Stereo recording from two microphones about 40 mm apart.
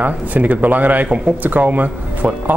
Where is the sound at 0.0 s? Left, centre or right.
Right.